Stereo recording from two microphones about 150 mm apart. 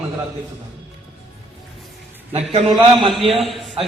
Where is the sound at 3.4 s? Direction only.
Centre (ahead or behind).